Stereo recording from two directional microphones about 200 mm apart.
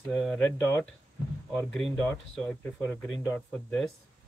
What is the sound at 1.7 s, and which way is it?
Speech, 5° left (ahead or behind).